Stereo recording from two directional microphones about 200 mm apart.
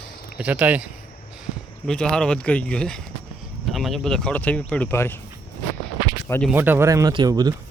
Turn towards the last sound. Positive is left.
turn(degrees=-20)  # may be behind; listen again after turning